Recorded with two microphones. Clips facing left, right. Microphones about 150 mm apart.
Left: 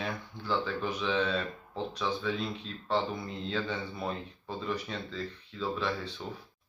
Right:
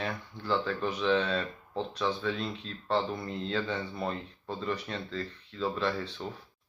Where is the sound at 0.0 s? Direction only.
Centre (ahead or behind).